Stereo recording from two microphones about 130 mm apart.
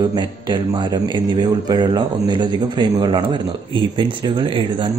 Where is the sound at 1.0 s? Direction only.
30° right (ahead or behind).